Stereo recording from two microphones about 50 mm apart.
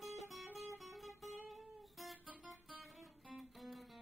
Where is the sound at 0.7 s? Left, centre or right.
Centre.